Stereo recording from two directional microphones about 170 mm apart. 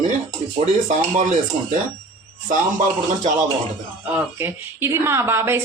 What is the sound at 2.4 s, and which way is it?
Speech, 50° right (ahead or behind).